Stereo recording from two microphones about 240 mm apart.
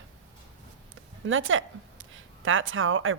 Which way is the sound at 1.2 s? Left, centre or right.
Right.